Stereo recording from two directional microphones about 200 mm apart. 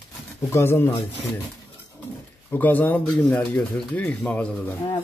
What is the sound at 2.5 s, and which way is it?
Speech, 10° left (ahead or behind).